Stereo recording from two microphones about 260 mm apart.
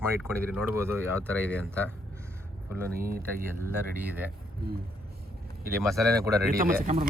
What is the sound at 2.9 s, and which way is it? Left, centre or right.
Speech, right.